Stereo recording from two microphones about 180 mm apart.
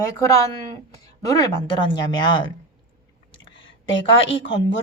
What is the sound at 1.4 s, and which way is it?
A woman's voice, 25° left (ahead or behind).